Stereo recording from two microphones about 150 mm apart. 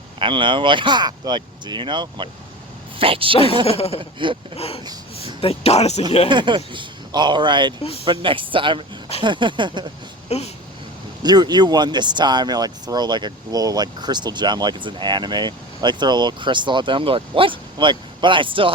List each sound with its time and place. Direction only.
0.2 s speech: 35° right (ahead or behind)
3.7 s speech: 40° left (ahead or behind)
6.2 s speech: 30° right (ahead or behind)
10.2 s speech: 45° left (ahead or behind)
11.2 s speech: 30° right (ahead or behind)